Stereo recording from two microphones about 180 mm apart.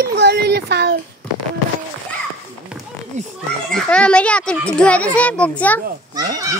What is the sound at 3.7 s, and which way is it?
A child's voice, 5° left (ahead or behind).